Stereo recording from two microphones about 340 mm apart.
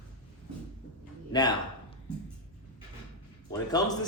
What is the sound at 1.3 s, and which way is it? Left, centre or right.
Speech, centre.